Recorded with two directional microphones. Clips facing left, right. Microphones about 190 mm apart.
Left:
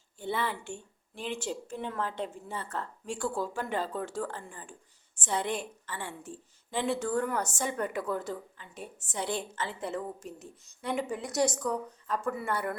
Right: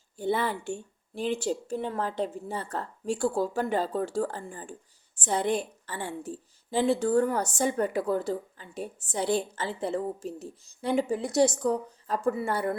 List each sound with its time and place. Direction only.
0.2 s a woman's voice: 40° right (ahead or behind)